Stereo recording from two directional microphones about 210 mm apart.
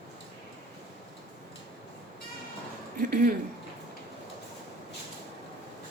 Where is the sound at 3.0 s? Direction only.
45° right (ahead or behind).